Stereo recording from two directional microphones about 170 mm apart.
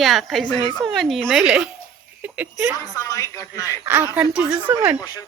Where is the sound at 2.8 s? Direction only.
20° left (ahead or behind).